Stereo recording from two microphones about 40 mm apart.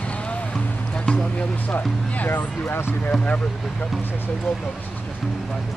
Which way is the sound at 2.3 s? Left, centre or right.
Left.